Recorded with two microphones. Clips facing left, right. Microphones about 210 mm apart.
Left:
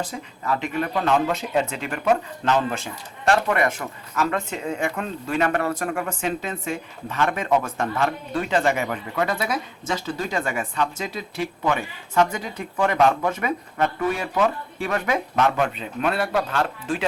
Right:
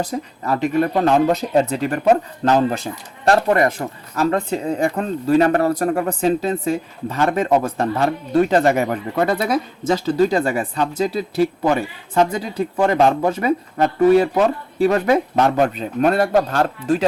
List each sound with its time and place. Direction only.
0.0 s speech: 40° right (ahead or behind)